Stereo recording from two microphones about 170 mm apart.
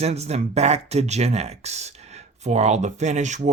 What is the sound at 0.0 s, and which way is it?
Speech, 40° right (ahead or behind).